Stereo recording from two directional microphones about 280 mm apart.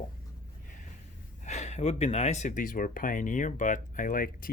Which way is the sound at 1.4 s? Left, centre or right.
Left.